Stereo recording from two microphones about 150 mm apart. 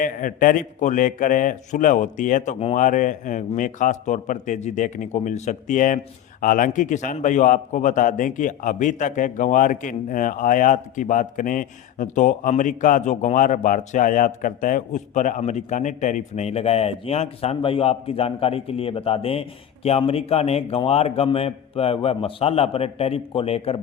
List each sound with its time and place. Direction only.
0.0 s a man's voice: 65° left (ahead or behind); by 2.7 s 45° left (ahead or behind)
2.7 s a man's voice: 60° left (ahead or behind); by 23.8 s 40° left (ahead or behind)